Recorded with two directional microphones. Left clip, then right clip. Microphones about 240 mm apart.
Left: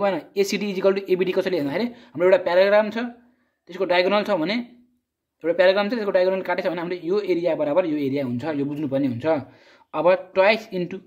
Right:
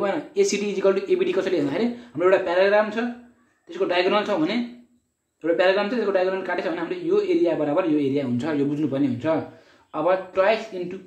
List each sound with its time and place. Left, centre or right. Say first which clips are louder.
0.0 s a man's voice: even; left